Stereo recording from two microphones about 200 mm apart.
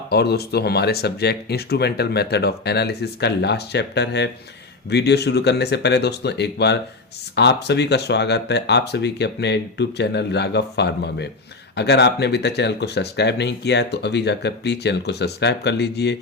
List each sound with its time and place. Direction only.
0.1 s speech: 55° left (ahead or behind)